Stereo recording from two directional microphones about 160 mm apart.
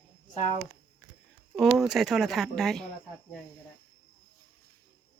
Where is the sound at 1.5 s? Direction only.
Centre (ahead or behind).